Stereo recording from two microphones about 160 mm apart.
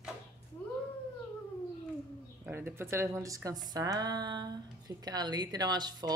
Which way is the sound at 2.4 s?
15° right (ahead or behind).